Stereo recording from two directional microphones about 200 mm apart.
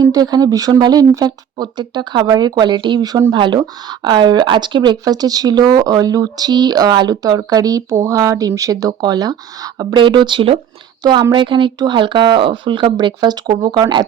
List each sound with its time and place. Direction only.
0.0 s speech: 20° right (ahead or behind)